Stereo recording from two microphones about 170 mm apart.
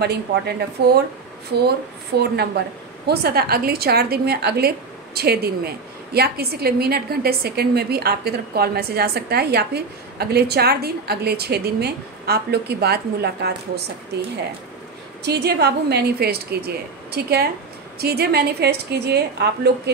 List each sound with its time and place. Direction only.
0.0 s a woman's voice: 70° right (ahead or behind)
2.1 s a woman's voice: 70° right (ahead or behind)
15.2 s a woman's voice: 70° right (ahead or behind)